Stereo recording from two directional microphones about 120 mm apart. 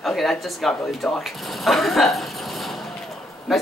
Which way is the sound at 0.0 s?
Centre (ahead or behind).